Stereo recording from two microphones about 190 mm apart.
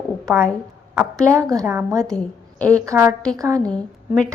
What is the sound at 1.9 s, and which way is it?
Speech, 5° left (ahead or behind).